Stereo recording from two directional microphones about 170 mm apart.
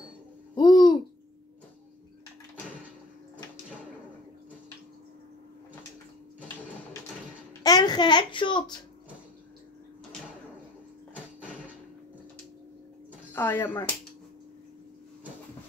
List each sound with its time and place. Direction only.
0.6 s babbling: 25° left (ahead or behind)
7.6 s a child's voice: 25° left (ahead or behind)
13.3 s speech: 10° left (ahead or behind)